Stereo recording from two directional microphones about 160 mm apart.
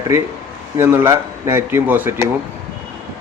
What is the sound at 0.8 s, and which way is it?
Speech, 15° right (ahead or behind).